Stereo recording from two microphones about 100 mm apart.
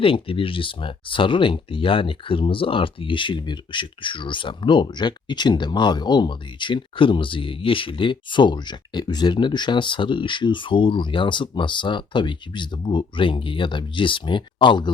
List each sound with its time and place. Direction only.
0.0 s speech: 65° left (ahead or behind)